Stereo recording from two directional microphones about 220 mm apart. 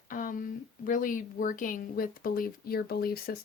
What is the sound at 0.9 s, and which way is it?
Speech, 40° left (ahead or behind).